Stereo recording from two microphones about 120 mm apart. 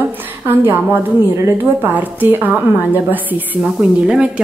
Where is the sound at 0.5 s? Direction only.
20° right (ahead or behind).